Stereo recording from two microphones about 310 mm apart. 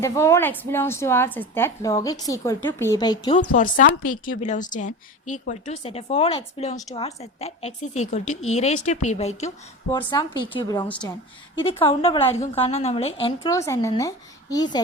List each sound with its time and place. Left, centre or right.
0.0 s a woman's voice: centre
3.5 s a woman's voice: left; by 11.2 s centre
11.6 s a woman's voice: centre